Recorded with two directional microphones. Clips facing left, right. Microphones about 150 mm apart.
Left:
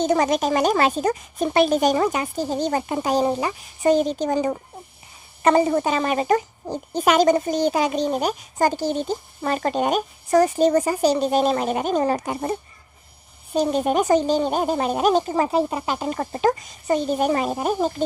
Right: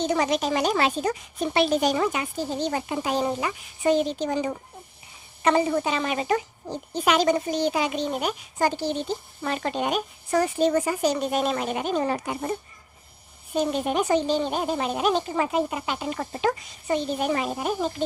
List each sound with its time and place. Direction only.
0.0 s speech: 45° left (ahead or behind)